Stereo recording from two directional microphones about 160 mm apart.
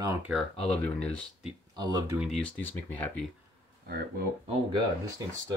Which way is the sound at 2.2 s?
Centre (ahead or behind).